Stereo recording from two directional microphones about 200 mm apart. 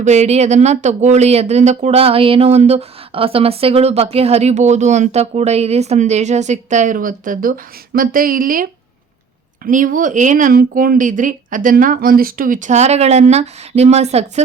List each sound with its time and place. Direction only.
0.0 s speech: 35° right (ahead or behind)
9.6 s speech: 40° right (ahead or behind)